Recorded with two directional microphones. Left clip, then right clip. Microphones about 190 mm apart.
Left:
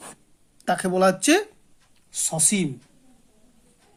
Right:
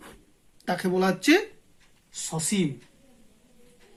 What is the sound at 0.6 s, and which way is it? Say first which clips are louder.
Speech: left 6 dB; 30° left (ahead or behind).